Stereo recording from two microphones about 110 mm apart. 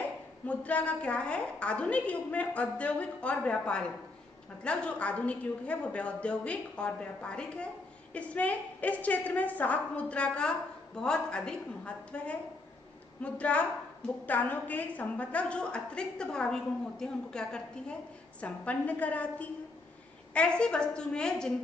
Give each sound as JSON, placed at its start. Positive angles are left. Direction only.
{"t": 0.5, "sound": "a woman's voice", "side_deg": 10}